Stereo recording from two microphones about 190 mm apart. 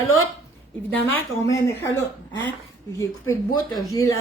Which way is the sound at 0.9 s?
15° left (ahead or behind).